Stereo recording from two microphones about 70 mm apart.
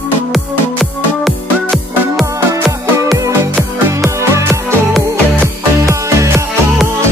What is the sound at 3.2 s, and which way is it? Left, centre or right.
Music, right.